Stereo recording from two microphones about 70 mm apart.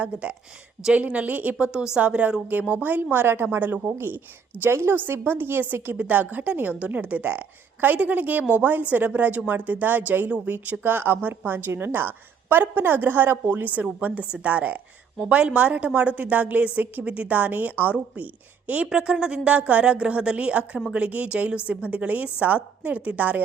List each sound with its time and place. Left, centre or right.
0.0 s a woman's voice: centre